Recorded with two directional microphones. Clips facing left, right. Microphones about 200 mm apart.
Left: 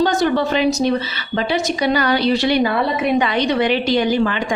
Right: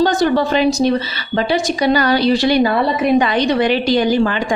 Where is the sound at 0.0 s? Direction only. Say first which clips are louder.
Right 2 dB; 35° right (ahead or behind).